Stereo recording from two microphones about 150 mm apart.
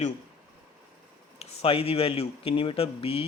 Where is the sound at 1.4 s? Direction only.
40° left (ahead or behind).